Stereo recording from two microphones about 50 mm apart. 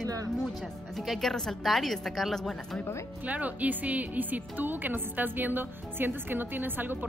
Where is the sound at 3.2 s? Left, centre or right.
Right.